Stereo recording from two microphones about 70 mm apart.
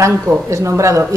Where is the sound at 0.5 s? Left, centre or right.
Right.